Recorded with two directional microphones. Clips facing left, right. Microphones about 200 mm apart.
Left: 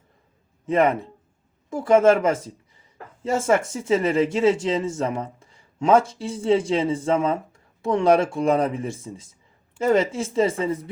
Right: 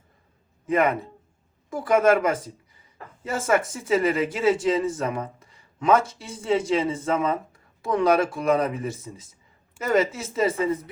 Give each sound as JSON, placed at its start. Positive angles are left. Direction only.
{"t": 0.6, "sound": "a man's voice", "side_deg": 25}